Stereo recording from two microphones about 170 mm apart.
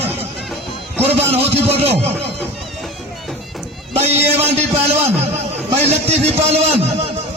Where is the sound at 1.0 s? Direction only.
35° right (ahead or behind).